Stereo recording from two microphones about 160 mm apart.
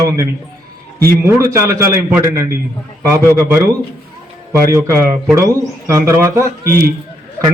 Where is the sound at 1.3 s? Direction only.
15° right (ahead or behind).